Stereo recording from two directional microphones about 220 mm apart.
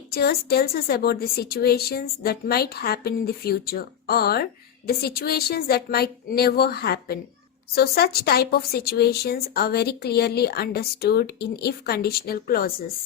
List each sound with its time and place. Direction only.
0.1 s speech: 45° left (ahead or behind)